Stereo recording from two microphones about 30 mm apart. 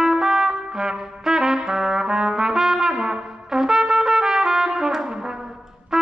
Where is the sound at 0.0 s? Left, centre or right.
Centre.